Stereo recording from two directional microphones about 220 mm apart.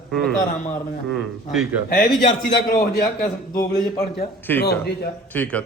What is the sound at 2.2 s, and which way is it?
A man's voice, 45° left (ahead or behind).